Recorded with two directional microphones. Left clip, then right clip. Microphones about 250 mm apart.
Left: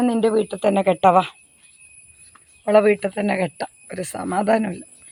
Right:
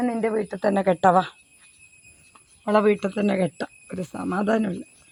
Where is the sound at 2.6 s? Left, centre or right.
Centre.